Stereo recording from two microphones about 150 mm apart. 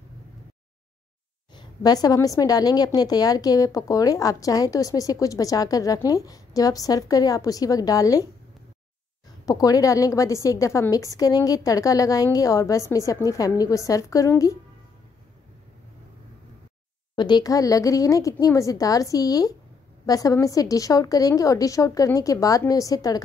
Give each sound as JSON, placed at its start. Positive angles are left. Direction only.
{"t": 1.5, "sound": "a woman's voice", "side_deg": 30}
{"t": 9.5, "sound": "a woman's voice", "side_deg": 25}
{"t": 17.1, "sound": "a woman's voice", "side_deg": 30}